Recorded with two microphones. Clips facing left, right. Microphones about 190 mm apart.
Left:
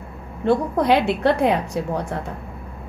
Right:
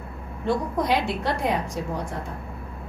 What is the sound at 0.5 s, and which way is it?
A woman's voice, 65° left (ahead or behind).